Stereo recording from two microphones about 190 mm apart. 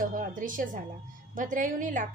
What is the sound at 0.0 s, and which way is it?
Music, 45° right (ahead or behind).